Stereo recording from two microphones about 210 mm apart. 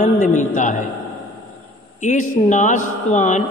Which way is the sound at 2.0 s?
35° left (ahead or behind).